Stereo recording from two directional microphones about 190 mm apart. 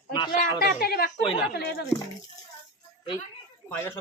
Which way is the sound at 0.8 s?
55° left (ahead or behind).